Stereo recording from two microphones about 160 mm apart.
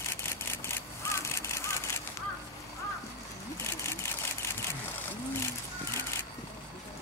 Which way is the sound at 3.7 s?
15° left (ahead or behind).